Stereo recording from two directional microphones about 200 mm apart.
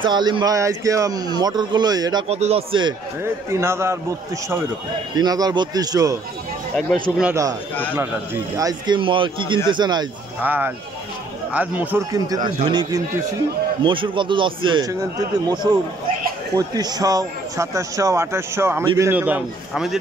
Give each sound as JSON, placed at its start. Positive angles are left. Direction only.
{"t": 0.0, "sound": "speech", "side_deg": -20}
{"t": 2.2, "sound": "speech", "side_deg": -30}
{"t": 3.4, "sound": "speech", "side_deg": -15}
{"t": 5.1, "sound": "speech", "side_deg": -20}
{"t": 6.8, "sound": "speech", "side_deg": 0}
{"t": 8.5, "sound": "speech", "side_deg": -20}
{"t": 10.4, "sound": "speech", "side_deg": -10}